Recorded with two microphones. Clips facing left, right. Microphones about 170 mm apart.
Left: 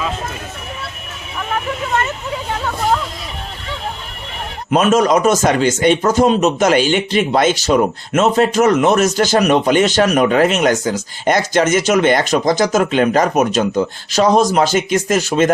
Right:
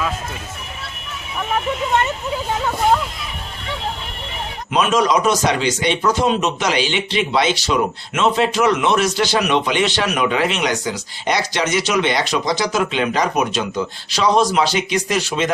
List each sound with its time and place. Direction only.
4.7 s speech: 45° left (ahead or behind)